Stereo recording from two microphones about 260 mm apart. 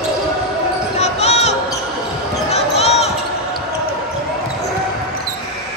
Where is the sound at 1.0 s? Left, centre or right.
Left.